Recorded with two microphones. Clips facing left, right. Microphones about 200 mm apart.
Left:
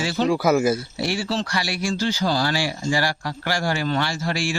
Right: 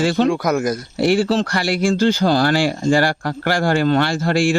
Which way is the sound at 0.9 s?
55° right (ahead or behind).